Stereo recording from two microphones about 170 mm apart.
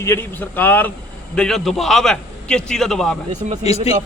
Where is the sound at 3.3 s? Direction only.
45° right (ahead or behind).